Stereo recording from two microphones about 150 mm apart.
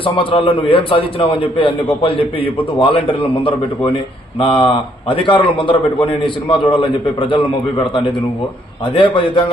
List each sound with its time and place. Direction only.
0.0 s a man's voice: 35° left (ahead or behind)
9.0 s a man's voice: 35° left (ahead or behind)